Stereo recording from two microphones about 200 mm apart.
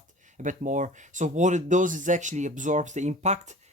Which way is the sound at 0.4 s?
40° right (ahead or behind).